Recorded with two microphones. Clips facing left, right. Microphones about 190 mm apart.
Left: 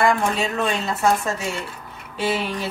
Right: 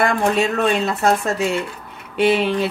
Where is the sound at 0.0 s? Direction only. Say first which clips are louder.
Right 3 dB; 65° right (ahead or behind).